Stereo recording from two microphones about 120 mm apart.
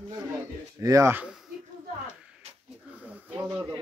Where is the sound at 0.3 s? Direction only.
25° right (ahead or behind).